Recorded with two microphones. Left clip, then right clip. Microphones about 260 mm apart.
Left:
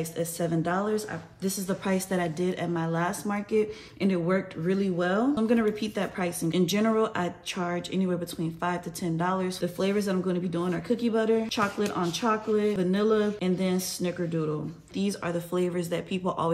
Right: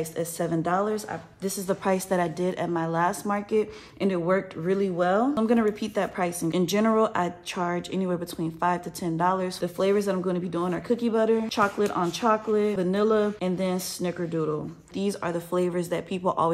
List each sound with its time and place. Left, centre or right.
0.2 s a woman's voice: right